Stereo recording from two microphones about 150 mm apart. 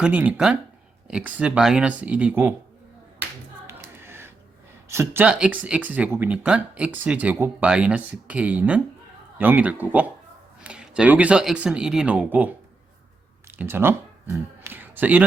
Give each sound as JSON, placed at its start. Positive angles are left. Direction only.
{"t": 0.0, "sound": "speech", "side_deg": -10}
{"t": 3.7, "sound": "music", "side_deg": -15}
{"t": 4.9, "sound": "speech", "side_deg": -15}
{"t": 13.6, "sound": "speech", "side_deg": -15}